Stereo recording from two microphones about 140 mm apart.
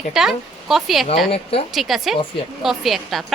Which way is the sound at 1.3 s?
45° left (ahead or behind).